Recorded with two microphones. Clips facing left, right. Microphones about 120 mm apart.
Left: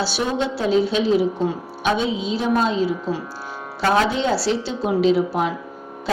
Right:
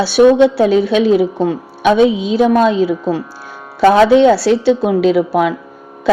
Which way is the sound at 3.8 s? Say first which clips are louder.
Right 11 dB; 80° right.